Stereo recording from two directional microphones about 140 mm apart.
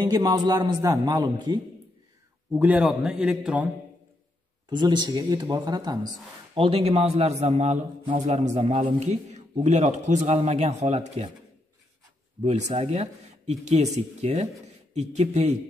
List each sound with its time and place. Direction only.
0.0 s a man's voice: 30° right (ahead or behind)
2.5 s a man's voice: 10° right (ahead or behind)
4.6 s speech: 30° right (ahead or behind)
6.5 s a man's voice: 40° right (ahead or behind)
12.4 s speech: 55° right (ahead or behind)